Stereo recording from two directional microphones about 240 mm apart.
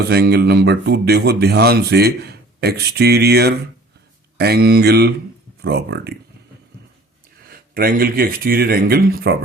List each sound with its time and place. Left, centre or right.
0.0 s speech: right
7.4 s speech: right